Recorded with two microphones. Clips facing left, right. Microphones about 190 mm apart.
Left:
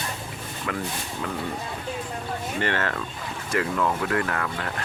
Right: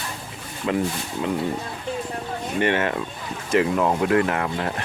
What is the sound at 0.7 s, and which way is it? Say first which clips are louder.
Speech: right 8 dB; 25° right (ahead or behind).